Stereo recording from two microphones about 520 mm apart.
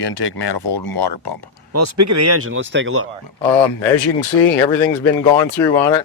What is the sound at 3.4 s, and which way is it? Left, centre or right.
Speech, left.